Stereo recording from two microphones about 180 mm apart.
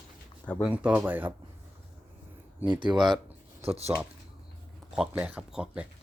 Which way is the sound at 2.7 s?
25° right (ahead or behind).